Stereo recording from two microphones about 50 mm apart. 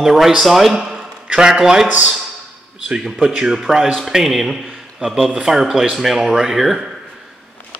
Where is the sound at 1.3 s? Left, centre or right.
Centre.